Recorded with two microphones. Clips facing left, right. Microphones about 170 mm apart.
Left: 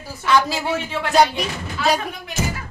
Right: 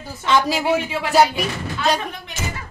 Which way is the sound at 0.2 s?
20° right (ahead or behind).